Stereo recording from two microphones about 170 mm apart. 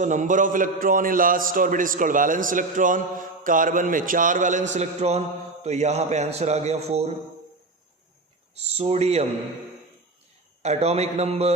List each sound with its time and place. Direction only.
0.0 s a man's voice: 45° right (ahead or behind)
8.5 s a man's voice: 40° right (ahead or behind)
10.6 s a man's voice: 40° right (ahead or behind)